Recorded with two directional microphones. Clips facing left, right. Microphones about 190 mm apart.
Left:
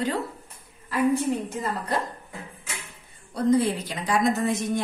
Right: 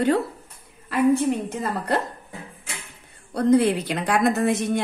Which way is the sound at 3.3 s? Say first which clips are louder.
Right 4 dB; 65° right (ahead or behind).